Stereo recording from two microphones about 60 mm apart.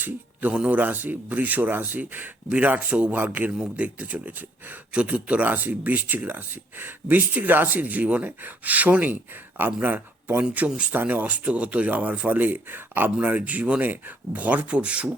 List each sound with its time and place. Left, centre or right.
0.5 s speech: right